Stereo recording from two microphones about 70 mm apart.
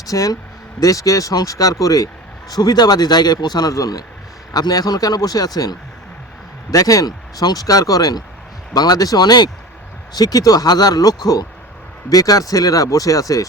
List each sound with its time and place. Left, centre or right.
0.1 s speech: left
2.5 s a man's voice: left
4.5 s a man's voice: left
10.2 s speech: left